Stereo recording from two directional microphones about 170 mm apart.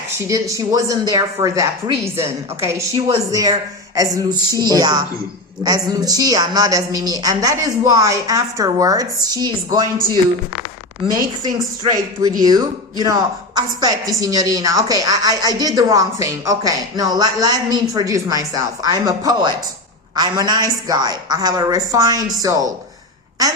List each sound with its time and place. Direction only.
0.2 s a woman's voice: 20° right (ahead or behind)
11.4 s a woman's voice: 25° right (ahead or behind)